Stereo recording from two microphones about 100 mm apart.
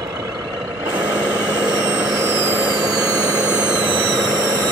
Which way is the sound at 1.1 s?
15° right (ahead or behind).